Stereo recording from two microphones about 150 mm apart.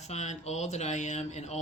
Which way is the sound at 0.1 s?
50° left (ahead or behind).